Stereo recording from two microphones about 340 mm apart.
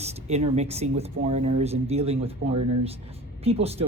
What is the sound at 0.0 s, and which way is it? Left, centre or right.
Speech, centre.